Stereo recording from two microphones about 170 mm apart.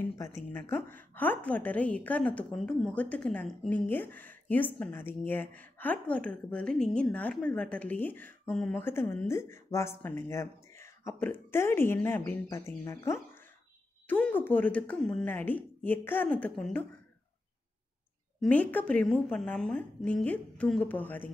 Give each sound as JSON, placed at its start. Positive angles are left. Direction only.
{"t": 0.5, "sound": "a woman's voice", "side_deg": 10}
{"t": 18.4, "sound": "a woman's voice", "side_deg": 10}